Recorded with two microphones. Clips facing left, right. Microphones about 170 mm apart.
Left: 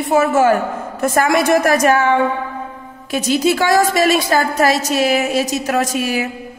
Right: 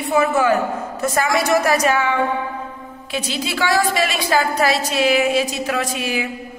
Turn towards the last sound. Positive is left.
turn(degrees=45)  # may be behind; listen again after turning